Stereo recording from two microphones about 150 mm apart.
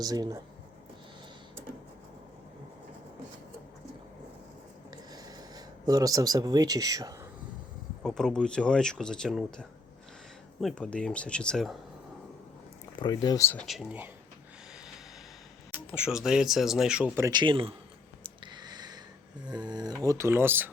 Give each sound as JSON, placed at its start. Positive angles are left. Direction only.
{"t": 0.0, "sound": "speech", "side_deg": -25}
{"t": 5.1, "sound": "speech", "side_deg": -25}
{"t": 8.0, "sound": "speech", "side_deg": 5}
{"t": 13.0, "sound": "speech", "side_deg": 30}
{"t": 13.7, "sound": "speech", "side_deg": 0}
{"t": 16.0, "sound": "speech", "side_deg": -5}
{"t": 17.2, "sound": "speech", "side_deg": -20}
{"t": 17.4, "sound": "a man's voice", "side_deg": -35}
{"t": 18.2, "sound": "a sound", "side_deg": -30}
{"t": 19.5, "sound": "speech", "side_deg": -30}